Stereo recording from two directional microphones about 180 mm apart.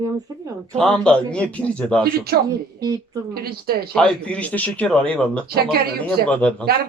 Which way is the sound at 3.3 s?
60° right (ahead or behind).